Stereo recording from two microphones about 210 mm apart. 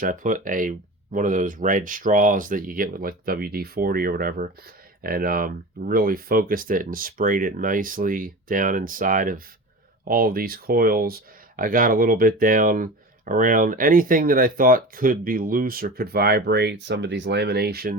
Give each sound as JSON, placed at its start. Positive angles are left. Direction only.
{"t": 0.0, "sound": "speech", "side_deg": -40}